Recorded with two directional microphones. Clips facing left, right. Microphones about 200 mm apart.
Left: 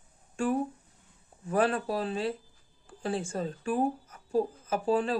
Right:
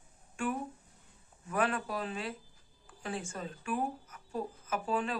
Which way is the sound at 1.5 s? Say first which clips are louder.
Left 6 dB; 30° left (ahead or behind).